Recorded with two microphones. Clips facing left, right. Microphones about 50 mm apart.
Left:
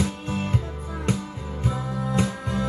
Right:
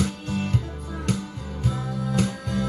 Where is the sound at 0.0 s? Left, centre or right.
Left.